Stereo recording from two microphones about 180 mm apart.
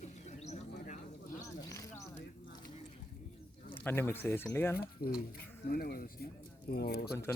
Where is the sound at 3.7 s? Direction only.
10° left (ahead or behind).